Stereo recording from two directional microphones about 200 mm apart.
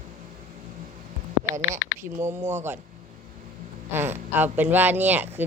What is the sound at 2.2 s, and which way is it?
Speech, 10° right (ahead or behind).